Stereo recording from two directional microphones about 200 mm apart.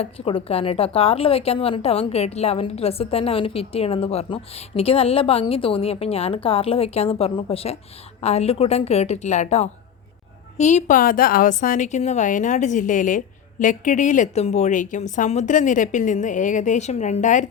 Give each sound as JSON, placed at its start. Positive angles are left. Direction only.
{"t": 0.0, "sound": "a woman's voice", "side_deg": 25}